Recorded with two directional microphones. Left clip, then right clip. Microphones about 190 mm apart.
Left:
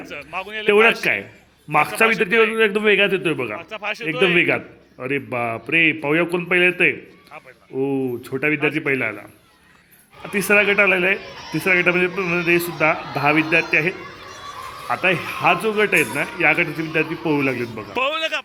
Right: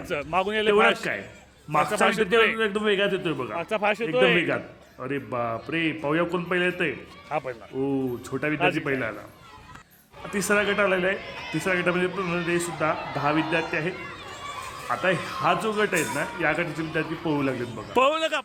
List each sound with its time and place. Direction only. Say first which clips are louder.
0.0 s a man's voice: right 4 dB; 20° right (ahead or behind)
1.0 s a man's voice: left 9 dB; 10° left (ahead or behind)
3.6 s a man's voice: right 3 dB; 15° right (ahead or behind)
4.0 s a man's voice: left 5 dB; 20° left (ahead or behind)
4.4 s a man's voice: left 7 dB; 10° left (ahead or behind)
7.3 s a man's voice: right 17 dB; 25° right (ahead or behind)
7.8 s a man's voice: left 6 dB; centre (ahead or behind)
10.3 s a man's voice: left 7 dB; 10° left (ahead or behind)
14.8 s a man's voice: left 5 dB; 10° left (ahead or behind)
17.9 s a man's voice: even; 25° right (ahead or behind)